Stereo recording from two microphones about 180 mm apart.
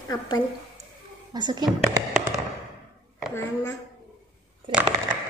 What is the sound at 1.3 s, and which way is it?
Speech, 25° right (ahead or behind).